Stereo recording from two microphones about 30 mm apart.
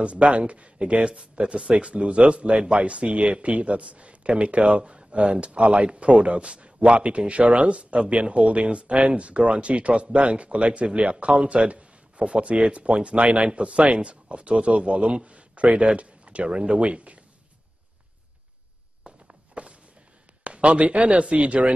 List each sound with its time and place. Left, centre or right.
0.0 s a man's voice: right
16.4 s speech: right
16.8 s a man's voice: right
19.0 s walk: right
20.4 s speech: right